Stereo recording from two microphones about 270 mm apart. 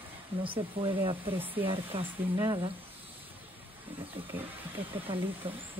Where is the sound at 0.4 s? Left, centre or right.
Centre.